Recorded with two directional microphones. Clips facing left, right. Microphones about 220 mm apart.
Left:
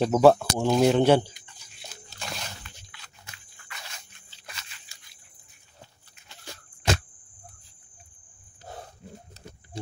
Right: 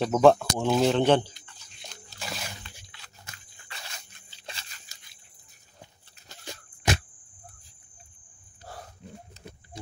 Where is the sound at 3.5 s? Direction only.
30° right (ahead or behind).